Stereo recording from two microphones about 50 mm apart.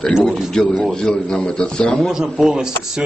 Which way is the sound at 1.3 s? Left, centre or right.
Centre.